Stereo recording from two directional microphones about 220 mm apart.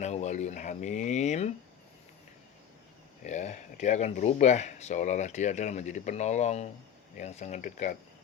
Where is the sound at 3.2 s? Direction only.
30° left (ahead or behind).